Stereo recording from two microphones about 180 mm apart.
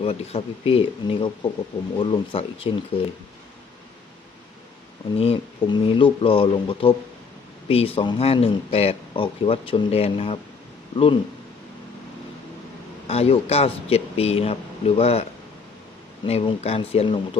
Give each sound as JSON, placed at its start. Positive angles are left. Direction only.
{"t": 0.0, "sound": "speech", "side_deg": 35}
{"t": 5.1, "sound": "speech", "side_deg": 35}
{"t": 13.1, "sound": "speech", "side_deg": 35}